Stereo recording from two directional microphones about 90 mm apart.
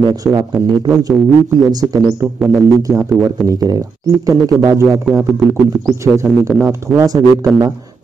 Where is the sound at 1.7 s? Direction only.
45° right (ahead or behind).